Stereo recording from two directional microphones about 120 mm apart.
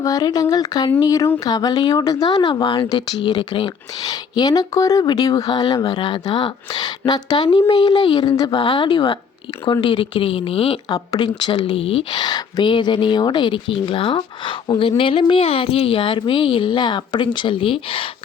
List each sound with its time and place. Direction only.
0.0 s speech: 30° left (ahead or behind)
8.5 s speech: 45° left (ahead or behind)
10.8 s speech: 35° left (ahead or behind); by 12.0 s 55° left (ahead or behind)
12.1 s speech: 35° left (ahead or behind)